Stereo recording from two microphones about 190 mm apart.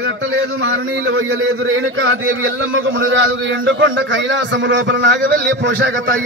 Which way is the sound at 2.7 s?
90° right.